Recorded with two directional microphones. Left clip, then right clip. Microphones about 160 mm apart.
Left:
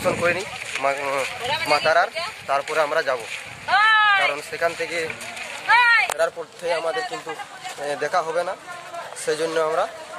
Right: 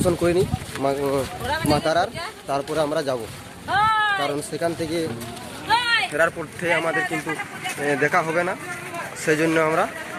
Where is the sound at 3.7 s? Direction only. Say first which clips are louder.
Left 3 dB; 50° left (ahead or behind).